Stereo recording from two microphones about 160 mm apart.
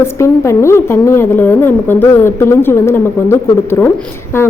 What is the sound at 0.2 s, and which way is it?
A woman's voice, 15° left (ahead or behind).